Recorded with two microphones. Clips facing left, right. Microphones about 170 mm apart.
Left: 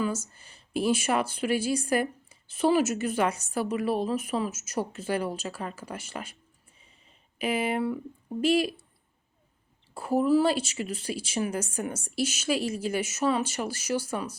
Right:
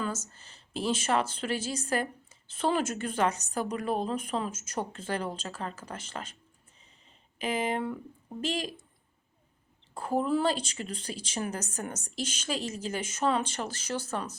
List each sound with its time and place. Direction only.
0.0 s speech: 10° left (ahead or behind)
7.3 s speech: 10° left (ahead or behind)
9.9 s speech: 10° left (ahead or behind)